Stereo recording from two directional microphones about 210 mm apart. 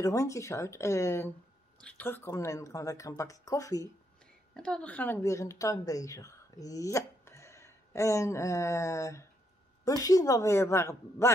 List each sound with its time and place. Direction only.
0.0 s speech: 15° left (ahead or behind)
4.6 s a woman's voice: 5° left (ahead or behind)